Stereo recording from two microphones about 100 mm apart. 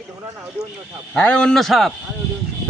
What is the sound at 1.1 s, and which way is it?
Speech, 10° left (ahead or behind).